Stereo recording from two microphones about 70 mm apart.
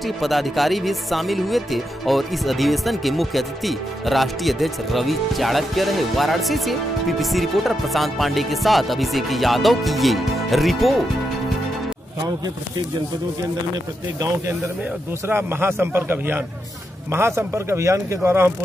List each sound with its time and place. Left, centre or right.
0.0 s speech: centre
15.2 s a man's voice: right